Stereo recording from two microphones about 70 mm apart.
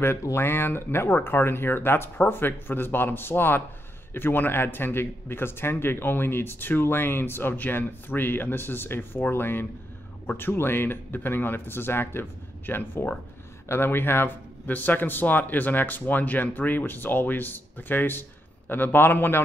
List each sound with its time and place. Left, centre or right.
0.2 s a man's voice: left